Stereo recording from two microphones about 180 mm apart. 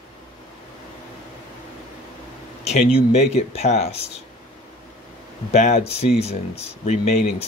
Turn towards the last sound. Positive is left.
turn(degrees=40)  # may be behind; listen again after turning